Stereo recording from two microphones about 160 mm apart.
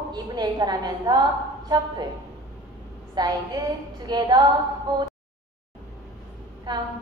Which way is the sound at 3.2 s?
25° right (ahead or behind).